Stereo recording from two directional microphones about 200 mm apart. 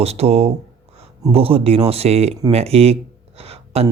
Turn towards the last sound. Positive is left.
turn(degrees=-30)  # may be behind; listen again after turning